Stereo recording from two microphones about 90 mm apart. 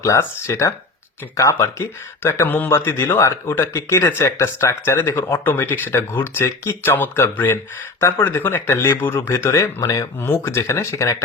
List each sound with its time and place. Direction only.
0.0 s speech: 30° left (ahead or behind)